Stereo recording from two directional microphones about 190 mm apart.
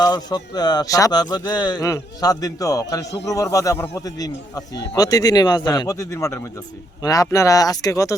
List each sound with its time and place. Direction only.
0.0 s speech: 20° left (ahead or behind)